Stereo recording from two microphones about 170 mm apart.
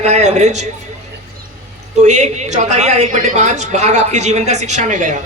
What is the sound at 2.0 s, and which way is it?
A woman's voice, 45° right (ahead or behind).